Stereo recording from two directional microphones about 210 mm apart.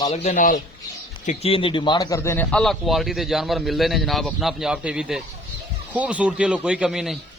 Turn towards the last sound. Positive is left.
turn(degrees=0)  # may be behind; listen again after turning